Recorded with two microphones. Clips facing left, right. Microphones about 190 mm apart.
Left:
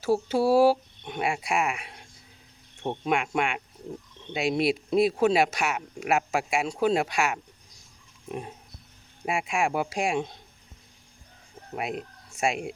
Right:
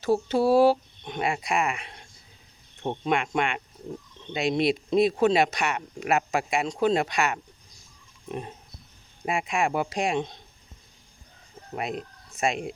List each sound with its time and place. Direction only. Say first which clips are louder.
0.0 s speech: right 1 dB; 5° left (ahead or behind)
8.3 s a sound: right 1 dB; 5° left (ahead or behind)
9.2 s speech: right 1 dB; 5° left (ahead or behind)
11.7 s speech: even; 5° left (ahead or behind)